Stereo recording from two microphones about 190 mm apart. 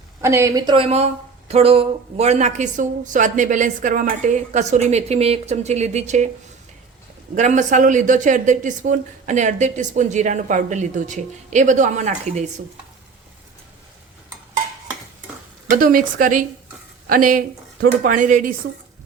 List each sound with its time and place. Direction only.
0.2 s speech: 15° right (ahead or behind); by 6.2 s 40° right (ahead or behind)
7.3 s speech: 40° right (ahead or behind)
15.7 s a woman's voice: 45° right (ahead or behind)